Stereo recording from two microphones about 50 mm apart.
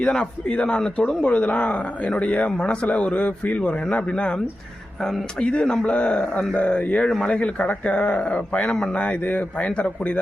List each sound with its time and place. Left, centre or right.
0.0 s a man's voice: centre
5.4 s a man's voice: centre
8.6 s a man's voice: centre
9.2 s a man's voice: left